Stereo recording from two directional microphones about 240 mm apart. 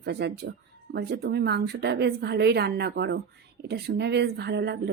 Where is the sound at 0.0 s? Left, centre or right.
Right.